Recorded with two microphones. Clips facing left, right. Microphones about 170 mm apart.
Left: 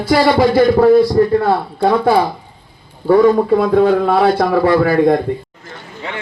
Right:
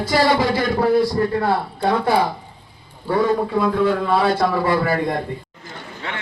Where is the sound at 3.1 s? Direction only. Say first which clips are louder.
Left 8 dB; 65° left (ahead or behind).